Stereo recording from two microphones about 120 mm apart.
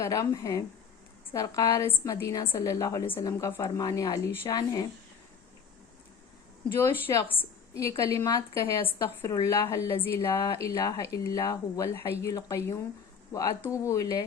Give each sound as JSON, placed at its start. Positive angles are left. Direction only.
{"t": 0.0, "sound": "speech", "side_deg": 25}
{"t": 6.7, "sound": "speech", "side_deg": 20}